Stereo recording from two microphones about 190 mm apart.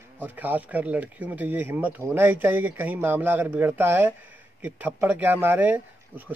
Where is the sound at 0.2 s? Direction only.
10° right (ahead or behind).